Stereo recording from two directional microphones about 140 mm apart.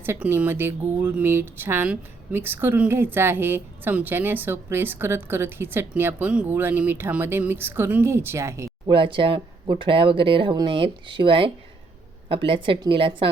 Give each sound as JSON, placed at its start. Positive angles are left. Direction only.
{"t": 0.0, "sound": "speech", "side_deg": -15}
{"t": 8.9, "sound": "speech", "side_deg": -35}